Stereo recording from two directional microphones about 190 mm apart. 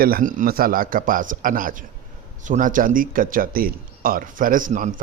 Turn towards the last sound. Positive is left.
turn(degrees=-45)  # may be behind; listen again after turning